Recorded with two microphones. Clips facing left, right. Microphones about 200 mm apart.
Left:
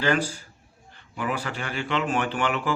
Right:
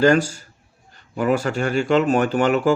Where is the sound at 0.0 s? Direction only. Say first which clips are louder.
Right 8 dB; 45° right (ahead or behind).